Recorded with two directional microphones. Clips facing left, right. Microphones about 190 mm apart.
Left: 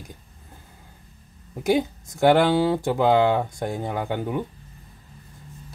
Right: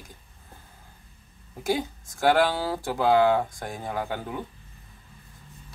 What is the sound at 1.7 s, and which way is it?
Speech, 20° left (ahead or behind).